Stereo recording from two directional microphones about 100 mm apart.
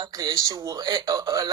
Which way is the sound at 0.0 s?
40° right (ahead or behind).